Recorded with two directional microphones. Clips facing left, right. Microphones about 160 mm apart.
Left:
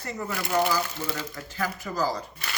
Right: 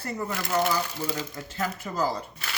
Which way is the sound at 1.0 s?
20° right (ahead or behind).